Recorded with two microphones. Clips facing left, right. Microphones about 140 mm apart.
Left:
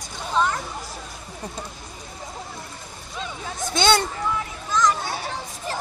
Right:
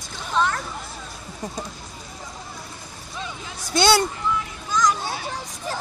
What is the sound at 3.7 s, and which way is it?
Speech, 10° right (ahead or behind).